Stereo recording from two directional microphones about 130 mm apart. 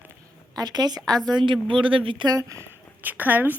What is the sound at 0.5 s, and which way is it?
A woman's voice, 30° right (ahead or behind).